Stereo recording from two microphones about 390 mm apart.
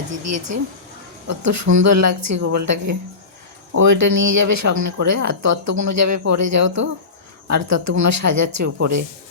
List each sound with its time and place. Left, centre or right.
0.1 s speech: right